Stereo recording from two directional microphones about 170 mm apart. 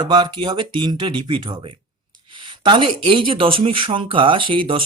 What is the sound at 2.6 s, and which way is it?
Speech, 30° right (ahead or behind).